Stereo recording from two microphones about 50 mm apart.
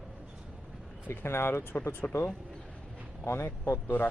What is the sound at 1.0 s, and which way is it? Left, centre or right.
Speech, left.